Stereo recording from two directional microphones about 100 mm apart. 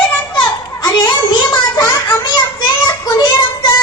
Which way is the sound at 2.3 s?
40° left (ahead or behind).